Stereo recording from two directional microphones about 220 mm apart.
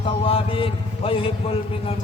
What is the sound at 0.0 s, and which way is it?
A man's voice, 25° left (ahead or behind).